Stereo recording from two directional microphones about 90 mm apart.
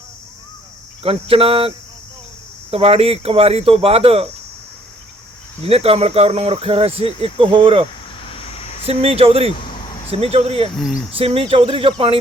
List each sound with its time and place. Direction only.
1.0 s speech: 90° right
5.7 s speech: 90° right
8.3 s a sound: 90° left
8.9 s speech: 90° right
10.8 s cricket: 5° right (ahead or behind)
11.3 s speech: 85° right